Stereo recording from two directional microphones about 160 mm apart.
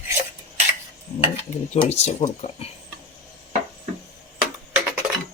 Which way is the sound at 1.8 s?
40° left (ahead or behind).